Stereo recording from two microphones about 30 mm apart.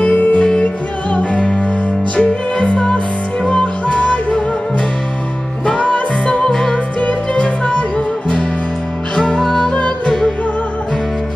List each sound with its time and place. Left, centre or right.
0.4 s music: left
1.1 s music: left
3.8 s music: left
5.9 s music: left
6.4 s music: centre
7.0 s music: left
9.5 s music: centre
9.8 s music: left